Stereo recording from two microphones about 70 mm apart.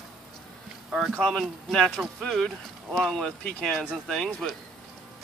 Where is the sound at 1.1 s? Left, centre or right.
Centre.